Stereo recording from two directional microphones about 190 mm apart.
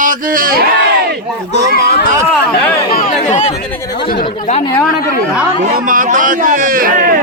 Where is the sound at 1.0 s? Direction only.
60° right (ahead or behind).